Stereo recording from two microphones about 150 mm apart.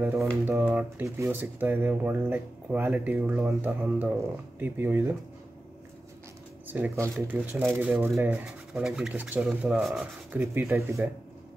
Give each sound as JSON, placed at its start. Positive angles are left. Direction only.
{"t": 0.0, "sound": "speech", "side_deg": -15}
{"t": 6.7, "sound": "speech", "side_deg": -15}
{"t": 10.3, "sound": "speech", "side_deg": -15}